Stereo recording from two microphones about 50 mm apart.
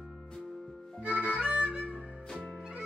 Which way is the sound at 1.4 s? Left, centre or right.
Right.